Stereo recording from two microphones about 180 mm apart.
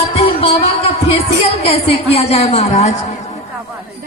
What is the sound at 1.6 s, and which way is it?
Speech, 35° left (ahead or behind).